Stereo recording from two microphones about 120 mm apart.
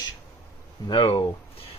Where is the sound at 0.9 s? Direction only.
45° left (ahead or behind).